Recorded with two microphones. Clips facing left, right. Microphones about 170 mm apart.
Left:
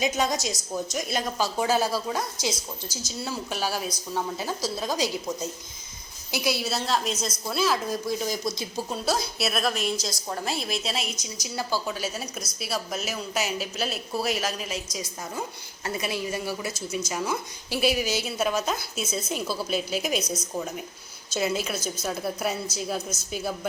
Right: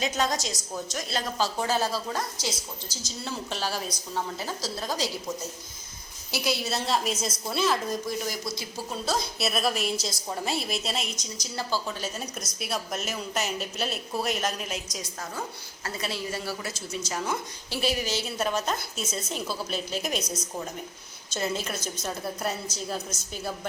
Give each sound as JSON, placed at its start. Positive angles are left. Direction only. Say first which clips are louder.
{"t": 0.0, "sound": "speech", "louder": "left 2 dB", "side_deg": 10}
{"t": 6.3, "sound": "a woman's voice", "louder": "left 1 dB", "side_deg": 10}
{"t": 8.3, "sound": "speech", "louder": "left 4 dB", "side_deg": 20}
{"t": 9.4, "sound": "a woman's voice", "louder": "left 1 dB", "side_deg": 0}
{"t": 15.4, "sound": "speech", "louder": "left 2 dB", "side_deg": 15}
{"t": 21.3, "sound": "speech", "louder": "left 3 dB", "side_deg": 10}